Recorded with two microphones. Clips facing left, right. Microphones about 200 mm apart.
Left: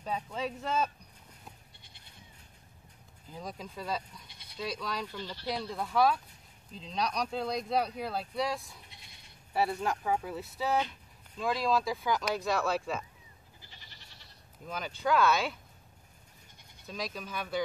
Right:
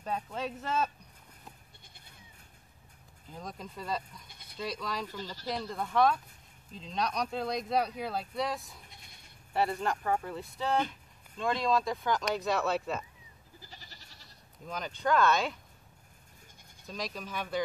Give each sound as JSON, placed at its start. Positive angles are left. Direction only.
{"t": 0.0, "sound": "speech", "side_deg": 0}
{"t": 3.3, "sound": "speech", "side_deg": 0}
{"t": 4.3, "sound": "bleat", "side_deg": -50}
{"t": 4.6, "sound": "speech", "side_deg": 0}
{"t": 5.1, "sound": "speech", "side_deg": -40}
{"t": 5.5, "sound": "speech", "side_deg": 0}
{"t": 13.6, "sound": "goat", "side_deg": -40}
{"t": 14.7, "sound": "speech", "side_deg": 5}
{"t": 16.8, "sound": "speech", "side_deg": 0}